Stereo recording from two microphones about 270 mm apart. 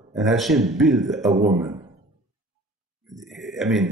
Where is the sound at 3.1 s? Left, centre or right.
Centre.